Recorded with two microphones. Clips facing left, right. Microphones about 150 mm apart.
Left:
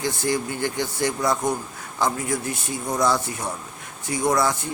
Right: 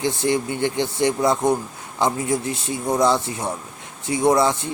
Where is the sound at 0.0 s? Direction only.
25° right (ahead or behind).